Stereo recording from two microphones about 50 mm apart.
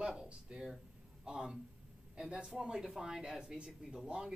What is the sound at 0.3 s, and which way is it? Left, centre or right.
Speech, centre.